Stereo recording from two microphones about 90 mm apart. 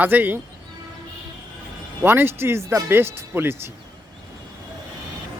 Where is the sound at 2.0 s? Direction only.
25° right (ahead or behind).